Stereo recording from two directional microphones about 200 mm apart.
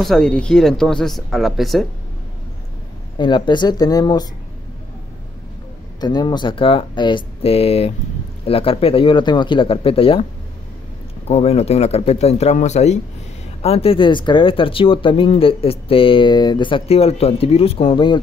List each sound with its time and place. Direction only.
0.0 s speech: centre (ahead or behind)
3.2 s speech: 25° left (ahead or behind)
5.9 s speech: 20° left (ahead or behind)
11.2 s speech: 30° left (ahead or behind)